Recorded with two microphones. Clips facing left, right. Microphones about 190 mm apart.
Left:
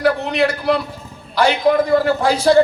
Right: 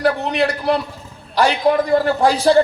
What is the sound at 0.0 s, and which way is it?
A man's voice, 35° right (ahead or behind).